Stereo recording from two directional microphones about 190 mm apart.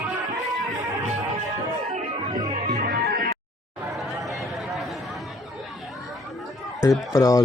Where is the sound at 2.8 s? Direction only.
50° right (ahead or behind).